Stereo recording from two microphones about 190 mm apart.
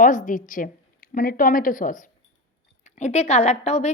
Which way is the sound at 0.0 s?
45° left (ahead or behind).